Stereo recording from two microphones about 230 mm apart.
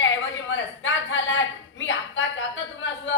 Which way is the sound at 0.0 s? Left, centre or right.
Left.